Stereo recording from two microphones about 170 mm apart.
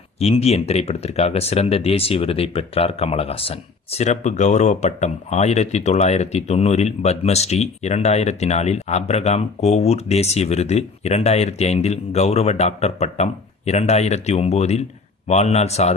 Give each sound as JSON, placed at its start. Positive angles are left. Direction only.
{"t": 0.2, "sound": "speech", "side_deg": 35}